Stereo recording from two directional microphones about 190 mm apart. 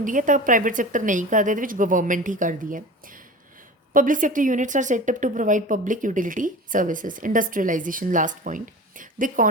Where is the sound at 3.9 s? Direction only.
45° right (ahead or behind).